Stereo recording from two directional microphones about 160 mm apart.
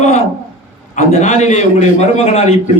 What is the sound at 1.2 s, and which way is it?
A man's voice, 45° left (ahead or behind).